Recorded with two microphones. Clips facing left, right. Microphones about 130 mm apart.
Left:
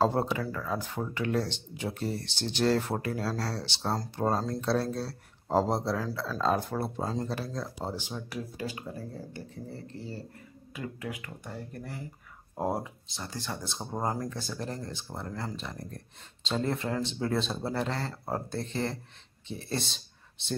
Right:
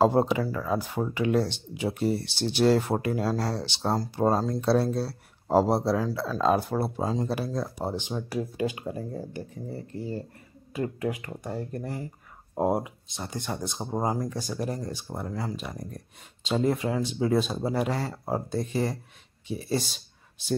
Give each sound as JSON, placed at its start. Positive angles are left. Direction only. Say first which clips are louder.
{"t": 0.0, "sound": "speech", "louder": "right 5 dB", "side_deg": -15}
{"t": 10.7, "sound": "speech", "louder": "right 8 dB", "side_deg": -40}
{"t": 12.5, "sound": "speech", "louder": "right 6 dB", "side_deg": -20}